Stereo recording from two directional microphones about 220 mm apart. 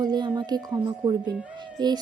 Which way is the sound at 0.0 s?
20° right (ahead or behind).